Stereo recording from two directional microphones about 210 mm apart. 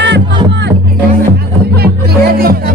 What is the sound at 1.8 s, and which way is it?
Music, 45° right (ahead or behind).